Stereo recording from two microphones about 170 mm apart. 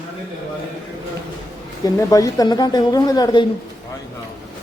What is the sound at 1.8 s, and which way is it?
A man's voice, 20° left (ahead or behind).